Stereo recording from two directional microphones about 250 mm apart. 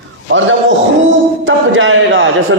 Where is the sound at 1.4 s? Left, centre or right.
Right.